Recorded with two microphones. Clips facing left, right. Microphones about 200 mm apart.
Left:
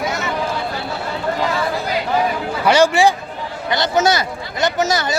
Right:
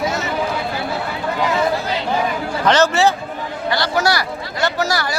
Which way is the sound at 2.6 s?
10° left (ahead or behind).